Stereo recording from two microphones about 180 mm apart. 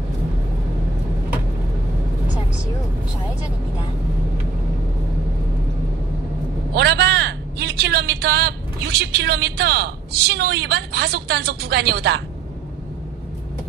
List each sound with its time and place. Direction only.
6.7 s speech: 65° right (ahead or behind)